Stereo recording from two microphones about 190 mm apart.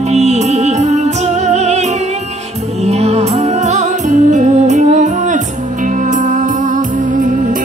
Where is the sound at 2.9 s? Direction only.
35° right (ahead or behind).